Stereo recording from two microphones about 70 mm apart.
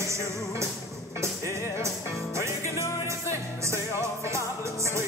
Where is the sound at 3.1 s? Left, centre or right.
Right.